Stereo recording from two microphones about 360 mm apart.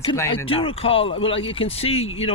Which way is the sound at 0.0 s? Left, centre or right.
Centre.